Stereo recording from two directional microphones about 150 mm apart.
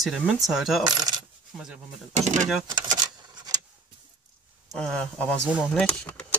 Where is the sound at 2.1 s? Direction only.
50° right (ahead or behind).